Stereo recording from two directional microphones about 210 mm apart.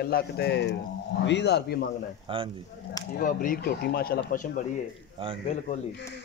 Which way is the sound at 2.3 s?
25° right (ahead or behind).